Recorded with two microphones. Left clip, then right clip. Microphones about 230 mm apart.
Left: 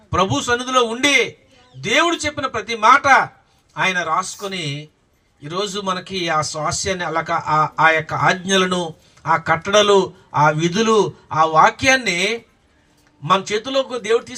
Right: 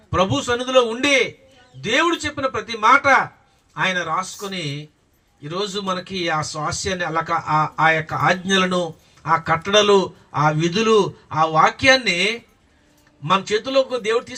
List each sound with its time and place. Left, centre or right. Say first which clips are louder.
0.1 s a man's voice: left 2 dB; left
13.2 s a man's voice: left 1 dB; left